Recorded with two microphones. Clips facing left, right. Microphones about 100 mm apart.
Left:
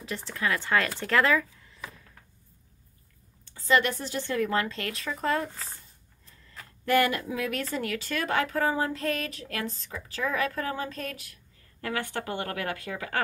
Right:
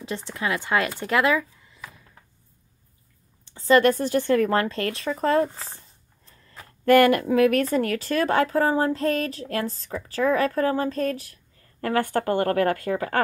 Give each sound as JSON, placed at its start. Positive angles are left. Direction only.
{"t": 0.0, "sound": "speech", "side_deg": -20}
{"t": 3.6, "sound": "a woman's voice", "side_deg": -45}
{"t": 6.9, "sound": "speech", "side_deg": -60}
{"t": 7.7, "sound": "a woman's voice", "side_deg": -45}